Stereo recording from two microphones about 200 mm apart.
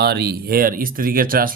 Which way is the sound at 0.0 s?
55° right (ahead or behind).